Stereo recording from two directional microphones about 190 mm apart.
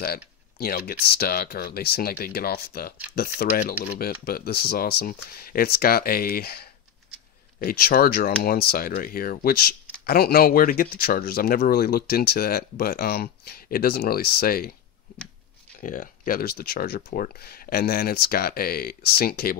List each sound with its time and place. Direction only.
0.0 s speech: 55° left (ahead or behind)
15.8 s speech: 45° left (ahead or behind)